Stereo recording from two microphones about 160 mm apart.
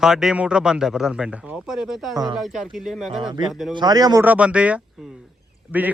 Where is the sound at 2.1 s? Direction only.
25° right (ahead or behind).